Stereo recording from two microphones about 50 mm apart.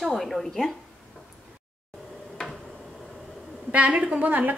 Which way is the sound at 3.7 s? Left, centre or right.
Right.